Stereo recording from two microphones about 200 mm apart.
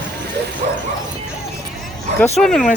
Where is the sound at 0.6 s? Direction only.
45° right (ahead or behind).